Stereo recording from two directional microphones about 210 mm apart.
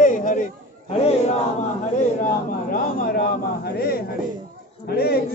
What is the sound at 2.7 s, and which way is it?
A man's voice, 40° left (ahead or behind).